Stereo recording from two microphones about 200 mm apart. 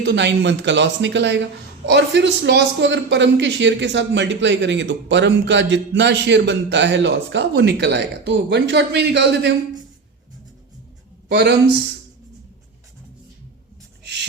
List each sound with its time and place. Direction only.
0.0 s speech: 60° right (ahead or behind)
11.3 s speech: 60° right (ahead or behind)